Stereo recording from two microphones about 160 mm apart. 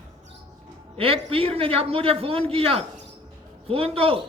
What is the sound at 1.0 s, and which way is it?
A man's voice, 35° right (ahead or behind).